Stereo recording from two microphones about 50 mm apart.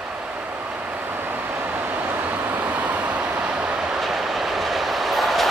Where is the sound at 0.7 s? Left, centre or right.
Right.